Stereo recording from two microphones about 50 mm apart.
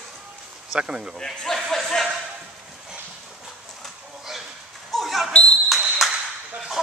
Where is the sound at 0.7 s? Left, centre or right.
Centre.